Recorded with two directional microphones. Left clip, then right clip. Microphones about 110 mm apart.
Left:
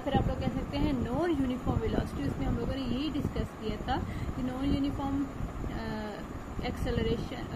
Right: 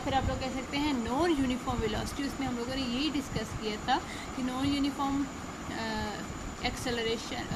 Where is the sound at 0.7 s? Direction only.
15° right (ahead or behind).